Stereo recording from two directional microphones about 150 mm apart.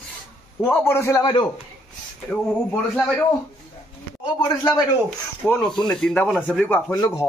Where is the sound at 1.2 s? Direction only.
30° left (ahead or behind).